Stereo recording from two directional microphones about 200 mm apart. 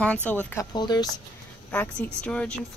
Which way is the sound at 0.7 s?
20° left (ahead or behind).